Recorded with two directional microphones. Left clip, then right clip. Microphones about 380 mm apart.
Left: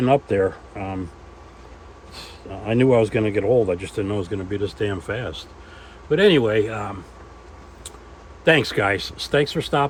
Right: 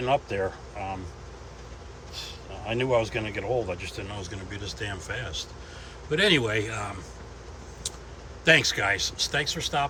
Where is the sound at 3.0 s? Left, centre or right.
Centre.